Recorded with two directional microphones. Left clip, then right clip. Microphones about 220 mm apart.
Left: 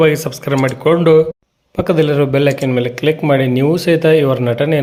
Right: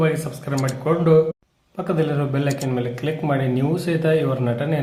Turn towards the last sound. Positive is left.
turn(degrees=40)  # may be behind; listen again after turning